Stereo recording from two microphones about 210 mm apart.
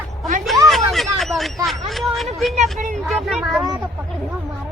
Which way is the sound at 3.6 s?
10° right (ahead or behind).